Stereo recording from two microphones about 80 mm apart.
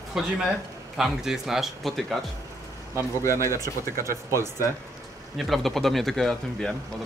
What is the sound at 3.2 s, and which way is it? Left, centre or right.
Speech, left.